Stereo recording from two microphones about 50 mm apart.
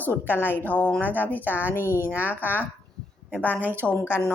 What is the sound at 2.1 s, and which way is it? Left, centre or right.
Speech, right.